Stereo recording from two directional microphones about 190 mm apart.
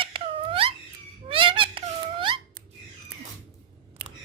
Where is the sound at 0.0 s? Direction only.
25° right (ahead or behind).